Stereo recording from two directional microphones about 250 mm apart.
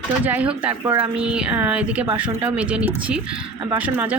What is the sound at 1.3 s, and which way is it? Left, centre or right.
Speech, centre.